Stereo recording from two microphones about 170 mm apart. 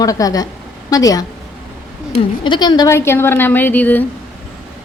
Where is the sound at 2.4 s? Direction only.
25° left (ahead or behind); by 4.0 s 10° left (ahead or behind).